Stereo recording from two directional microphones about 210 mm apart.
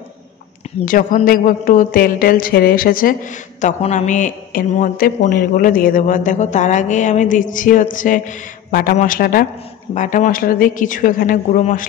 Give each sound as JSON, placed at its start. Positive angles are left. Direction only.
{"t": 0.8, "sound": "a man's voice", "side_deg": 40}